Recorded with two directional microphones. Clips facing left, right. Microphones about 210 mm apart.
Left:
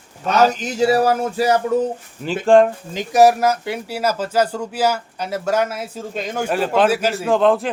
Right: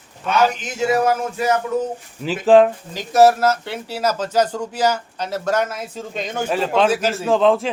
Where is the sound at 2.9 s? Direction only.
15° left (ahead or behind).